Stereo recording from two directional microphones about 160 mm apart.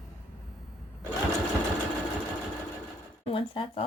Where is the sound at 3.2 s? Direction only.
35° left (ahead or behind).